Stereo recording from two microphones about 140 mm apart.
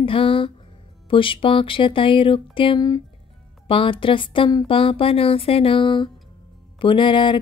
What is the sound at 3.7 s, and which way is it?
Speech, 40° left (ahead or behind).